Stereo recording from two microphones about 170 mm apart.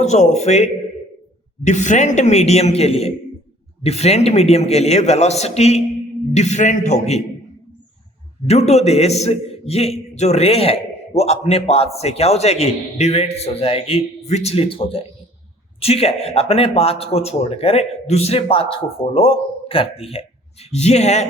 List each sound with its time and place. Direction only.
0.0 s a man's voice: 45° left (ahead or behind)
8.4 s a man's voice: 40° left (ahead or behind)